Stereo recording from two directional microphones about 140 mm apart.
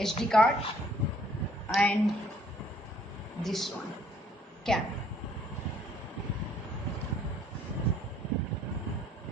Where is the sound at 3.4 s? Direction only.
Centre (ahead or behind).